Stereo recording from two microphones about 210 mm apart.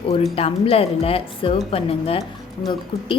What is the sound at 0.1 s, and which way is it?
A woman's voice, 30° left (ahead or behind).